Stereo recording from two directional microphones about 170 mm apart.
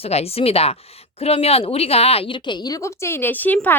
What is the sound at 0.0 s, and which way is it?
A woman's voice, 35° left (ahead or behind).